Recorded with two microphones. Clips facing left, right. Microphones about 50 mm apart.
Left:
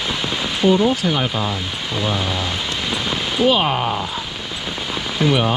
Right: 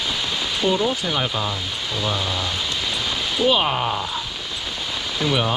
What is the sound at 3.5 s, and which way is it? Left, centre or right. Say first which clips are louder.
Speech: left 2 dB; left.